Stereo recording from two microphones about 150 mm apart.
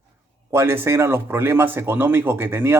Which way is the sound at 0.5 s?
15° right (ahead or behind).